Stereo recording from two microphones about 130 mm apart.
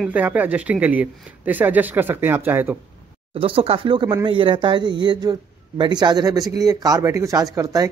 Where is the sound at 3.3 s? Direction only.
45° right (ahead or behind); by 7.8 s 25° right (ahead or behind).